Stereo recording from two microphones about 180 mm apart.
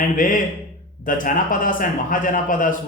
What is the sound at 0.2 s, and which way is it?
A man's voice, 50° left (ahead or behind).